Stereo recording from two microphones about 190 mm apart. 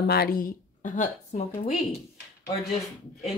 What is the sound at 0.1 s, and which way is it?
Speech, 55° left (ahead or behind).